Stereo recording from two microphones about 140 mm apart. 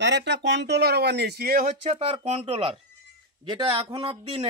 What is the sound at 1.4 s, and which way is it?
Speech, 90° right.